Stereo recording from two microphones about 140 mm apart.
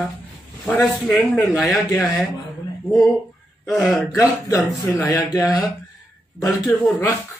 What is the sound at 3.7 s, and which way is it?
Speech, centre (ahead or behind).